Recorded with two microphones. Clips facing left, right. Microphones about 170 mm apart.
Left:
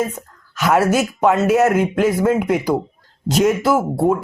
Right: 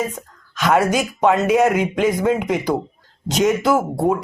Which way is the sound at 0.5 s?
5° left (ahead or behind).